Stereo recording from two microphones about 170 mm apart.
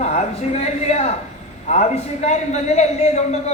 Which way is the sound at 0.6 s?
40° left (ahead or behind).